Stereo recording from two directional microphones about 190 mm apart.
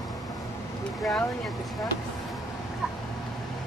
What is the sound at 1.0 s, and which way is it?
Speech, centre (ahead or behind).